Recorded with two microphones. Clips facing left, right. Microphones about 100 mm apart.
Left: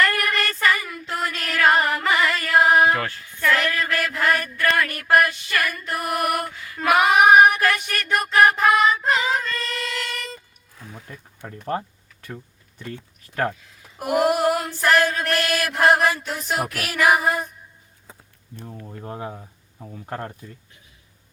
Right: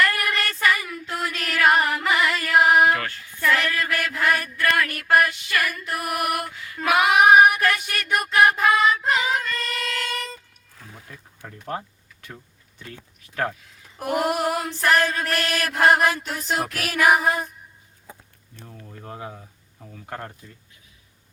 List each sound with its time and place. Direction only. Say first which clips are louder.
0.0 s music: left 1 dB; 5° right (ahead or behind)
2.9 s female singing: left 1 dB; 30° left (ahead or behind)
3.4 s a sound: left 1 dB; centre (ahead or behind)
4.8 s music: left 1 dB; 5° left (ahead or behind)
14.0 s music: left 4 dB; 5° left (ahead or behind)
15.4 s mantra: left 2 dB; 10° left (ahead or behind)
15.7 s music: even; centre (ahead or behind)
19.0 s speech: left 3 dB; 25° left (ahead or behind)